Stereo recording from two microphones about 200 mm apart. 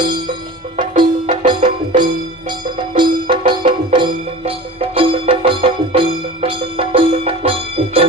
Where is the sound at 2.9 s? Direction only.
25° right (ahead or behind).